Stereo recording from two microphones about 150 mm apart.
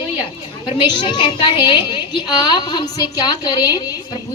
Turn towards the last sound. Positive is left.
turn(degrees=30)  # may be behind; listen again after turning